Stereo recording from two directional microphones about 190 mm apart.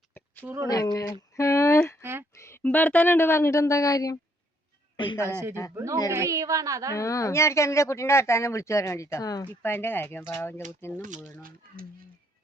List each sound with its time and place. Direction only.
0.4 s speech: 15° right (ahead or behind)
0.7 s speech: 20° left (ahead or behind)
2.0 s a sound: 10° right (ahead or behind)
2.4 s speech: 10° left (ahead or behind)
5.7 s speech: 15° right (ahead or behind)
6.9 s speech: 15° left (ahead or behind)